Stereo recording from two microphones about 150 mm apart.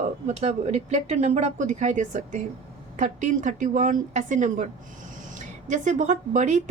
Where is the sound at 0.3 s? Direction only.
50° right (ahead or behind).